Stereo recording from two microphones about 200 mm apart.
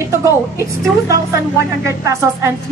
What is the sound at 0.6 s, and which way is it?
Speech, 15° right (ahead or behind).